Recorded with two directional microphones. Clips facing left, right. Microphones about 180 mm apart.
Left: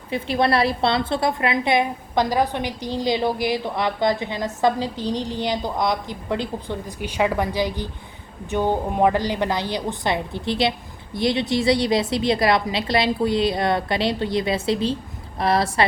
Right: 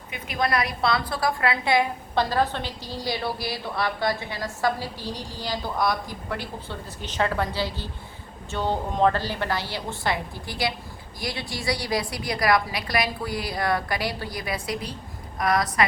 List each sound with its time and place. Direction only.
0.1 s a woman's voice: 30° left (ahead or behind)